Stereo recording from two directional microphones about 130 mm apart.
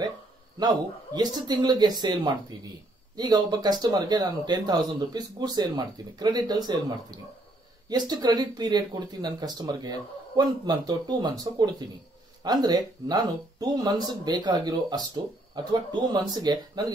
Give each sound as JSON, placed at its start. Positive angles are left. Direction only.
{"t": 0.6, "sound": "speech", "side_deg": -30}